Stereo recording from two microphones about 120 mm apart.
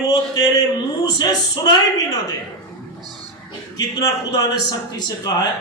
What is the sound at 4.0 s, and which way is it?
A man's voice, 30° left (ahead or behind).